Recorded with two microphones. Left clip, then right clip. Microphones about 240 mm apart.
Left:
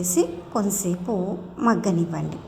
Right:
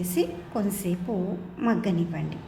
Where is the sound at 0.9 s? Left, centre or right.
Centre.